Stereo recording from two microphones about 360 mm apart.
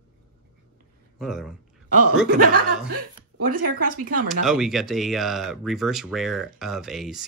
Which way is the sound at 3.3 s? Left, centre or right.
Right.